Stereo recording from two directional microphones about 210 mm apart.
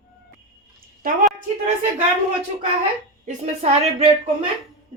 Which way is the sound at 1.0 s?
40° right (ahead or behind).